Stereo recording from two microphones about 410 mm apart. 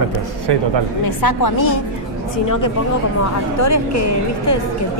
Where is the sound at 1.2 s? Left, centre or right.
Left.